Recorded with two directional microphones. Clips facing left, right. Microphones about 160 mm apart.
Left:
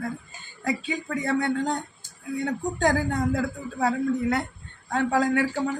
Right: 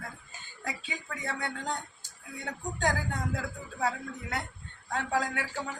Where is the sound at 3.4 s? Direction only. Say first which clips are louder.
Left 7 dB; 55° left (ahead or behind).